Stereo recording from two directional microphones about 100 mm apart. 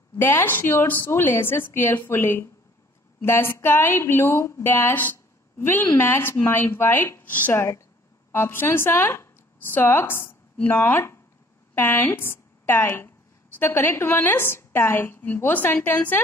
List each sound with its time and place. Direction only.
0.2 s a woman's voice: 20° left (ahead or behind)